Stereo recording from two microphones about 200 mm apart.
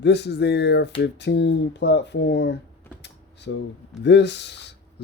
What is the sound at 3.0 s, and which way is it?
Drawer open or close, 60° left (ahead or behind).